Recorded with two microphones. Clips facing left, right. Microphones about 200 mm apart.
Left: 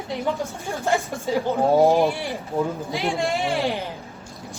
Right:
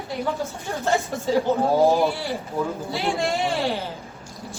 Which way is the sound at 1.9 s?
15° left (ahead or behind).